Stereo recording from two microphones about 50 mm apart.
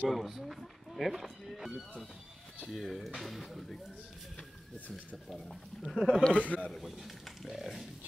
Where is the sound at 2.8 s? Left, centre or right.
Centre.